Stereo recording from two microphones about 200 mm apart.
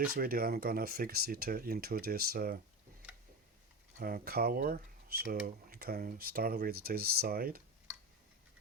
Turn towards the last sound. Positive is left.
turn(degrees=-50)  # may be behind; listen again after turning